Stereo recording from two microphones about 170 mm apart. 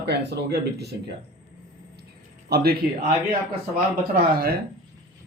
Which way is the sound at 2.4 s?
65° right (ahead or behind).